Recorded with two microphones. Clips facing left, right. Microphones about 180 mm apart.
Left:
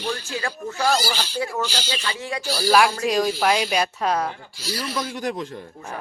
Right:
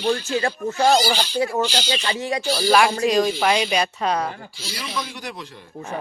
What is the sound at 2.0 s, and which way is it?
Speech, 25° right (ahead or behind).